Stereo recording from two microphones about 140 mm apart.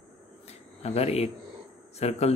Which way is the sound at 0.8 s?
50° left (ahead or behind).